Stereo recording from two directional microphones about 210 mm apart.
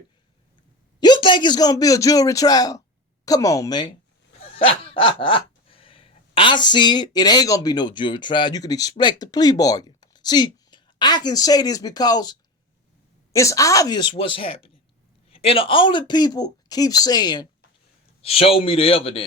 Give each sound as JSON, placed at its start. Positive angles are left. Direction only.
{"t": 0.9, "sound": "a man's voice", "side_deg": 20}
{"t": 4.4, "sound": "a sound", "side_deg": 30}
{"t": 13.3, "sound": "speech", "side_deg": 15}